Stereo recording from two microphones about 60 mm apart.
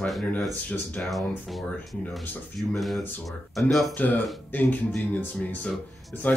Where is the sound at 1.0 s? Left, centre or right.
Centre.